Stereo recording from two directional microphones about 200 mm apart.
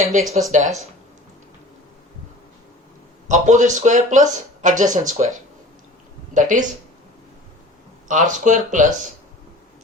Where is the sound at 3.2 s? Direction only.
35° right (ahead or behind).